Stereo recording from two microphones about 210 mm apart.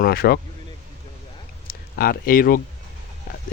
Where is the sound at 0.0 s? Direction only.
45° left (ahead or behind).